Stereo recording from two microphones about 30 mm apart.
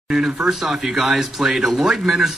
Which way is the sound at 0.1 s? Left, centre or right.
Centre.